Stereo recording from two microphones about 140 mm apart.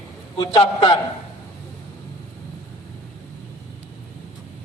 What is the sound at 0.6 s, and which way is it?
Speech, 45° left (ahead or behind).